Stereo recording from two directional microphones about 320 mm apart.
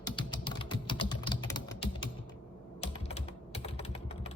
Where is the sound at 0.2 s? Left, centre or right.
Centre.